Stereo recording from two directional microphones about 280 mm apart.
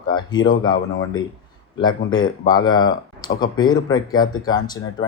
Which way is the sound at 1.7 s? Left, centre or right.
Centre.